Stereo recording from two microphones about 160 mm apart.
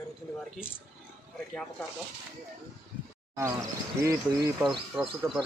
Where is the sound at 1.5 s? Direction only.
5° left (ahead or behind).